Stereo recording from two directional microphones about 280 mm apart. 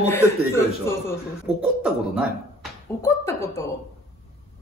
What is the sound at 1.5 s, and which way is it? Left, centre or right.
Beatboxing, right.